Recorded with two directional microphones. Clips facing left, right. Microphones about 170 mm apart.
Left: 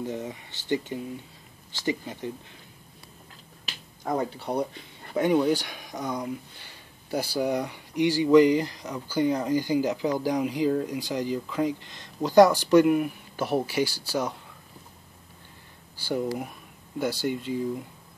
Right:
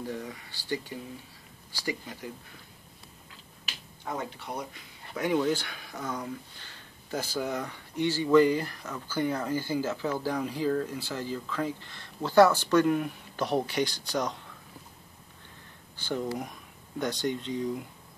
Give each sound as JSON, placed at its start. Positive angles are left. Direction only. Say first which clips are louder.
{"t": 0.0, "sound": "speech", "louder": "left 4 dB", "side_deg": 20}
{"t": 4.0, "sound": "speech", "louder": "left 7 dB", "side_deg": 40}
{"t": 5.4, "sound": "speech", "louder": "left 4 dB", "side_deg": 15}
{"t": 16.0, "sound": "speech", "louder": "left 3 dB", "side_deg": 10}